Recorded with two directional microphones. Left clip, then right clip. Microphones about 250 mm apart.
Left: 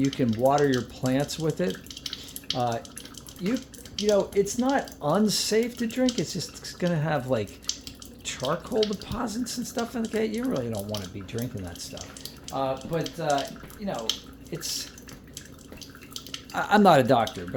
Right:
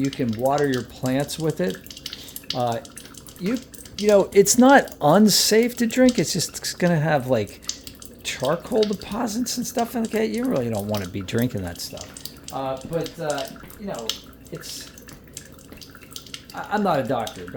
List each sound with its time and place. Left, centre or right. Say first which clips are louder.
0.0 s speech: even; centre
3.4 s typing: right 3 dB; centre
4.0 s speech: right 7 dB; right
8.3 s drip: right 6 dB; centre
8.7 s speech: right 4 dB; centre
9.0 s speech: right 5 dB; centre
11.0 s speech: right 9 dB; right
11.9 s speech: right 3 dB; centre
16.5 s speech: left 4 dB; left